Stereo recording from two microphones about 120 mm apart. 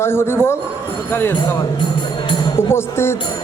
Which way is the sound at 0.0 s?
20° left (ahead or behind).